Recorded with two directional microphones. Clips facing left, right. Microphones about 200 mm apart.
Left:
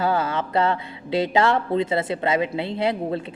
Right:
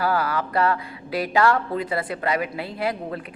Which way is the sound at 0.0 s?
25° left (ahead or behind).